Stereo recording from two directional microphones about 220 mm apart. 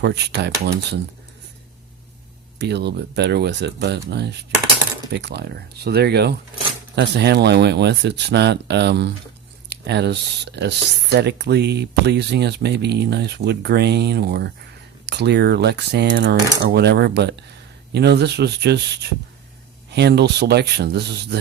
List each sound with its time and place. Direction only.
0.0 s speech: 50° right (ahead or behind)
2.6 s speech: 50° right (ahead or behind)